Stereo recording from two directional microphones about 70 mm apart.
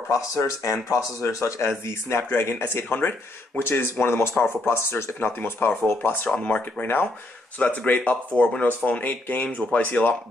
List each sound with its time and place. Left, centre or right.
0.7 s speech: left
6.3 s speech: centre
6.8 s speech: left